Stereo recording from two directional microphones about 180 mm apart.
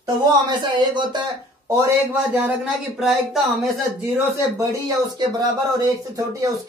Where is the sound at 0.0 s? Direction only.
25° right (ahead or behind).